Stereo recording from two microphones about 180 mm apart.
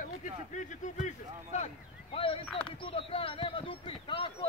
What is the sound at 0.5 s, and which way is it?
Speech, 45° left (ahead or behind).